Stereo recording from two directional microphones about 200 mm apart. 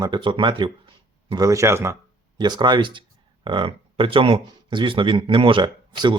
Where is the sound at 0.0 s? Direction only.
25° right (ahead or behind).